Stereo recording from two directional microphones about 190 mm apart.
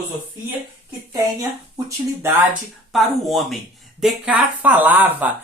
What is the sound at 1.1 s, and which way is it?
Speech, 15° right (ahead or behind).